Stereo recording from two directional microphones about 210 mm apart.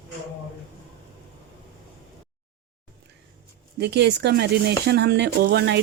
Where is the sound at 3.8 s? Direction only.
55° right (ahead or behind).